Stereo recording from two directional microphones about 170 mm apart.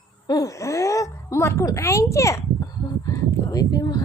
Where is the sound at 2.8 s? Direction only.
20° left (ahead or behind).